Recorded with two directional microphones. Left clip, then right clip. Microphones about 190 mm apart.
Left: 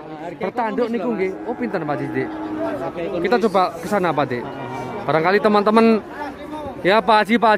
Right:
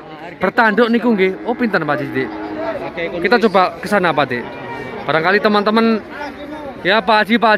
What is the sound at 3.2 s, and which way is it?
A man's voice, 15° left (ahead or behind).